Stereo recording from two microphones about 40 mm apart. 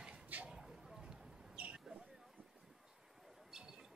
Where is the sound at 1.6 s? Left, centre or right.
Right.